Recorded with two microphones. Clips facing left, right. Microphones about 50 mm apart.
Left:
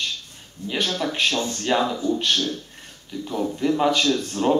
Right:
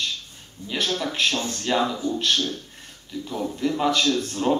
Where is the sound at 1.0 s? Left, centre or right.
Centre.